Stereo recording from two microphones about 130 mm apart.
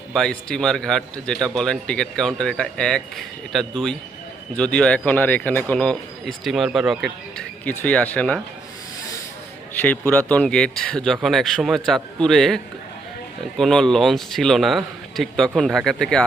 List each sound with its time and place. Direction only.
0.1 s a man's voice: 5° left (ahead or behind)
7.6 s speech: 15° left (ahead or behind)
9.8 s a man's voice: 10° left (ahead or behind)
13.6 s a man's voice: 5° left (ahead or behind)